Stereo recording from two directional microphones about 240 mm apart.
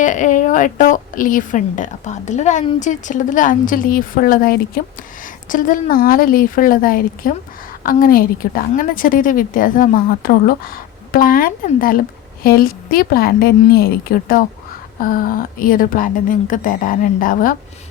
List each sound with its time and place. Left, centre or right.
0.0 s a woman's voice: left